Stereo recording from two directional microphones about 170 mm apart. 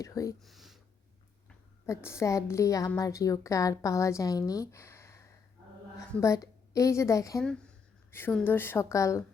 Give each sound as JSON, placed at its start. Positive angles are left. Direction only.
{"t": 0.0, "sound": "a woman's voice", "side_deg": 20}
{"t": 0.3, "sound": "a sound", "side_deg": 0}
{"t": 1.9, "sound": "a woman's voice", "side_deg": 15}